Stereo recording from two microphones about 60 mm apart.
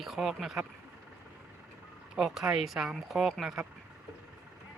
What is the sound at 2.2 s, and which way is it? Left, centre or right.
Speech, centre.